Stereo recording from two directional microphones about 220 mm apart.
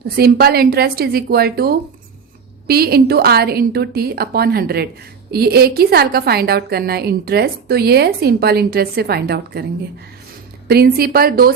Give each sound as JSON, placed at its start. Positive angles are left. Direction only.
{"t": 0.2, "sound": "a woman's voice", "side_deg": -45}
{"t": 10.7, "sound": "a woman's voice", "side_deg": -45}